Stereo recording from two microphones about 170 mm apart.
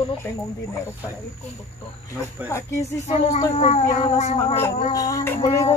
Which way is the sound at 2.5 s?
15° left (ahead or behind).